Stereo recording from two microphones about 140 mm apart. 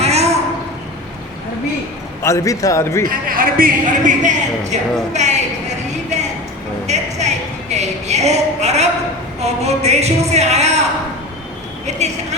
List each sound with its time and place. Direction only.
0.0 s a sound: 50° right (ahead or behind)
2.2 s a man's voice: 20° left (ahead or behind)
3.1 s speech: 80° right; by 6.2 s 55° right (ahead or behind)
6.8 s a sound: 55° right (ahead or behind)
9.4 s speech: 50° right (ahead or behind)
11.9 s speech: 55° right (ahead or behind)